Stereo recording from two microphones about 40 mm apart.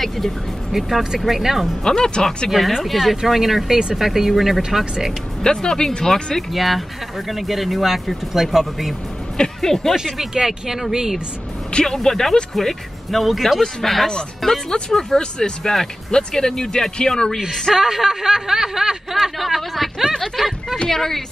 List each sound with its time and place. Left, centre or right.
0.7 s speech: centre
1.9 s speech: left
2.5 s speech: centre
5.4 s speech: centre
6.5 s speech: centre
9.4 s speech: centre
10.1 s speech: centre
11.8 s speech: centre
17.7 s speech: centre
19.1 s speech: centre